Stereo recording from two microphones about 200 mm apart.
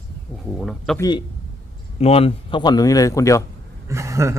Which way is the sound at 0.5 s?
Centre (ahead or behind).